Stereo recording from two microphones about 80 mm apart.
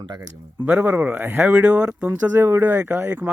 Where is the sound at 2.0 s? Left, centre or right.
Right.